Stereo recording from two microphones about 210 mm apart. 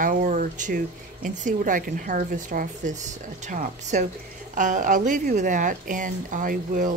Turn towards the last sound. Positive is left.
turn(degrees=-40)  # may be behind; listen again after turning